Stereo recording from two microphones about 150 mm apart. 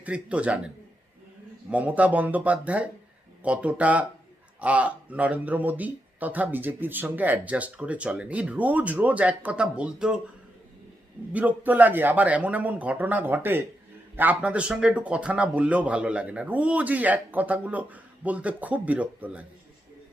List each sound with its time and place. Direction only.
0.0 s speech: 10° right (ahead or behind)
1.7 s speech: 10° right (ahead or behind)
11.3 s speech: 10° right (ahead or behind)